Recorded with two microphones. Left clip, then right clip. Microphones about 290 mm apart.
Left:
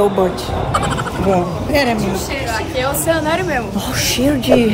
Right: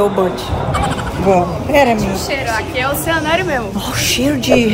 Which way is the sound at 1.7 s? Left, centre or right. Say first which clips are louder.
Right 4 dB; right.